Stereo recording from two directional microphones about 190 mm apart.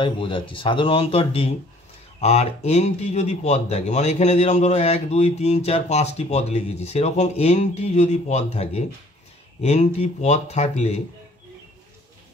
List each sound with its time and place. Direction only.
0.0 s speech: 25° left (ahead or behind)